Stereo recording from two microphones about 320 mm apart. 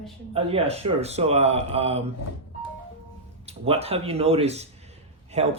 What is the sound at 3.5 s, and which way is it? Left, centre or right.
Speech, centre.